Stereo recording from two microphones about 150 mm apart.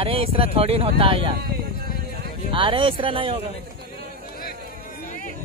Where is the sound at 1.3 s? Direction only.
90° right.